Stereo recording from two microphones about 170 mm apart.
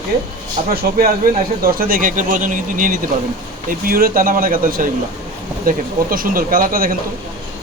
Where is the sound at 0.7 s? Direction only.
65° right (ahead or behind).